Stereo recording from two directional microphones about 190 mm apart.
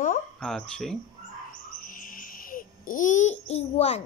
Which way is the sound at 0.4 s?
5° left (ahead or behind).